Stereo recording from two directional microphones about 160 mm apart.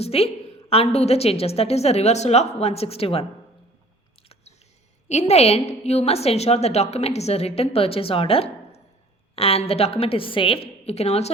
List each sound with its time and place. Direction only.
0.0 s a woman's voice: 40° left (ahead or behind)
5.0 s a woman's voice: 45° left (ahead or behind)